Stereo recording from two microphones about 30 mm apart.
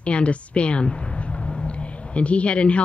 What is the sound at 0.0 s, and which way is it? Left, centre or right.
A woman's voice, left.